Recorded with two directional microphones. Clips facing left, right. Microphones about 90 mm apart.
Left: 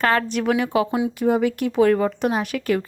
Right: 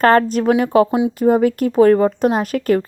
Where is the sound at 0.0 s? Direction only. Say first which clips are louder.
Right 7 dB; 40° right (ahead or behind).